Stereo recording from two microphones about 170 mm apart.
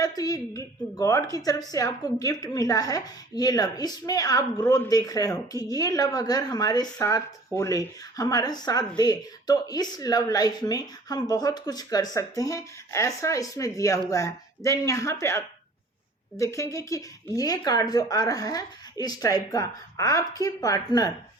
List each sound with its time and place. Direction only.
0.0 s speech: 20° left (ahead or behind)